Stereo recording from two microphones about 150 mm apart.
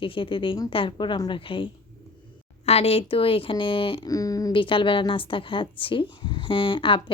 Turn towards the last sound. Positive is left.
turn(degrees=35)  # may be behind; listen again after turning